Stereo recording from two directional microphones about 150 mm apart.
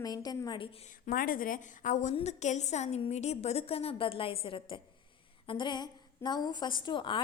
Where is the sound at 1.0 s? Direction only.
70° left (ahead or behind); by 7.2 s 35° left (ahead or behind).